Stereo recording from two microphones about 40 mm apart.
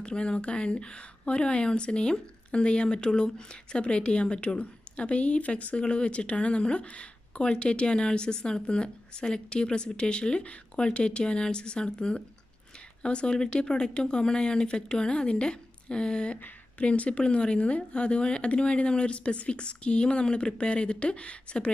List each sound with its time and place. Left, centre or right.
0.0 s speech: left